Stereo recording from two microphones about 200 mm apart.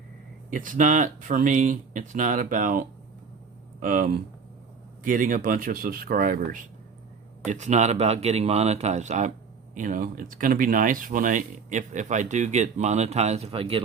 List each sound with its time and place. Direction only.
0.5 s speech: 40° right (ahead or behind)